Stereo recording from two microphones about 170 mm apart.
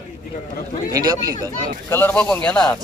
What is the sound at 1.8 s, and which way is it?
Speech, 15° left (ahead or behind).